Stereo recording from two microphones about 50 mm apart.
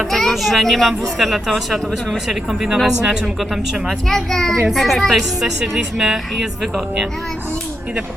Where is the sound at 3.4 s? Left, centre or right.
Centre.